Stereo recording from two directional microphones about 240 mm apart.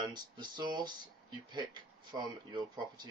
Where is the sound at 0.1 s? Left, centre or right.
Centre.